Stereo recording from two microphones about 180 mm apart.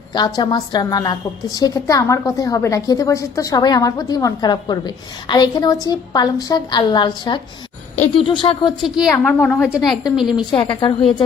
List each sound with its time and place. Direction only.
0.1 s a woman's voice: 20° left (ahead or behind)
9.1 s a woman's voice: 10° left (ahead or behind)
10.2 s a woman's voice: 25° left (ahead or behind)